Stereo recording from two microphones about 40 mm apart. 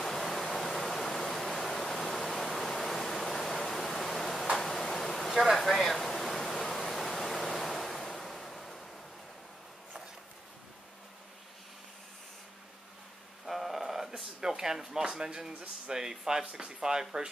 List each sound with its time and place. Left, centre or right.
0.0 s pink noise: centre
4.6 s tick-tock: centre
5.3 s pink noise: centre
13.5 s a sound: centre
15.9 s speech: centre
16.9 s speech: right